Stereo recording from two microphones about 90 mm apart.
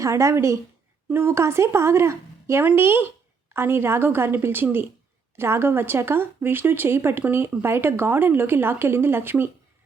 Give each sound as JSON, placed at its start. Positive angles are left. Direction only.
{"t": 0.0, "sound": "a woman's voice", "side_deg": -35}